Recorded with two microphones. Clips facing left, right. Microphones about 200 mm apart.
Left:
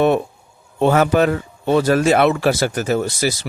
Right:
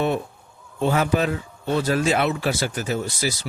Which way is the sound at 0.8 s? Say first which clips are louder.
Left 6 dB; 65° left (ahead or behind).